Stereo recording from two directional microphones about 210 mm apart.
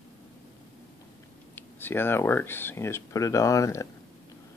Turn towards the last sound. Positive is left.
turn(degrees=15)  # may be behind; listen again after turning